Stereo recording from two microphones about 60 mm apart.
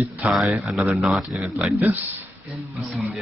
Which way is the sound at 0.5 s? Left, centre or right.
Centre.